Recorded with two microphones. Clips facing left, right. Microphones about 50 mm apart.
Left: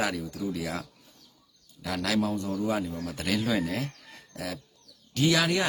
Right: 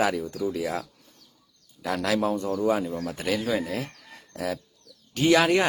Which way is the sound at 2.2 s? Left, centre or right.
Right.